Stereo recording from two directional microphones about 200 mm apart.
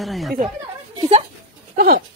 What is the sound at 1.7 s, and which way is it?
Speech, 45° right (ahead or behind).